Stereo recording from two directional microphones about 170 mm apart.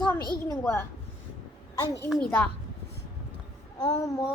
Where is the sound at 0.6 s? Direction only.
15° left (ahead or behind).